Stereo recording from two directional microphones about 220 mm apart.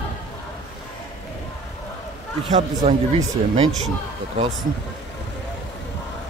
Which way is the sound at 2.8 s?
30° right (ahead or behind).